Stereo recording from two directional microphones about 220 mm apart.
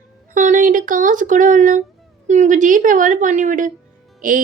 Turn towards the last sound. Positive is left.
turn(degrees=-35)  # may be behind; listen again after turning